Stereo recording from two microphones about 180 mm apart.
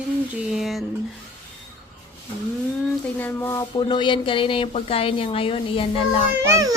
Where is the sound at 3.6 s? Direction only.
25° left (ahead or behind).